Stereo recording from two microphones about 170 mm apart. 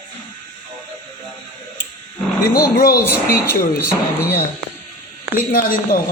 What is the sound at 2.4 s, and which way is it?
Speech, 60° left (ahead or behind).